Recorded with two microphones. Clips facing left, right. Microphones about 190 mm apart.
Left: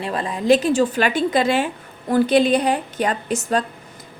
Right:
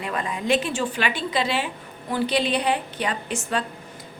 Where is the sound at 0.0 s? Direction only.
35° left (ahead or behind).